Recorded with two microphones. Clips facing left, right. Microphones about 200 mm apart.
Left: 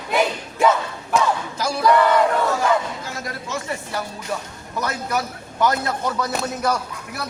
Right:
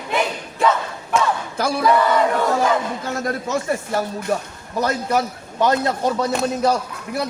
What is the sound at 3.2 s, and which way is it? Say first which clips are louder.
Speech: right 7 dB; 50° right (ahead or behind).